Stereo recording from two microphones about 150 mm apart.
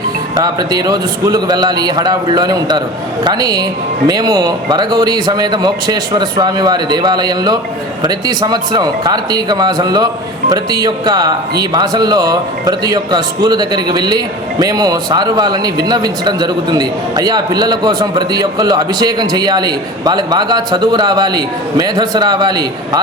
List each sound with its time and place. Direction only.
0.3 s a man's voice: 25° right (ahead or behind)